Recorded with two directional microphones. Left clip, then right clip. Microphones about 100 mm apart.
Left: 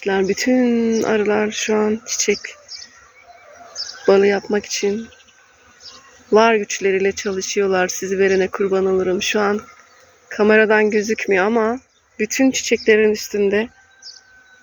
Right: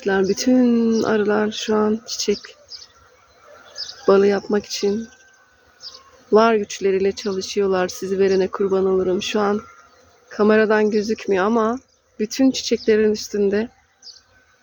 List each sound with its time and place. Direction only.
0.0 s speech: 35° right (ahead or behind)
0.9 s speech: 25° right (ahead or behind)
2.7 s bird: 35° right (ahead or behind)
4.0 s speech: 20° right (ahead or behind)
6.3 s speech: 15° right (ahead or behind)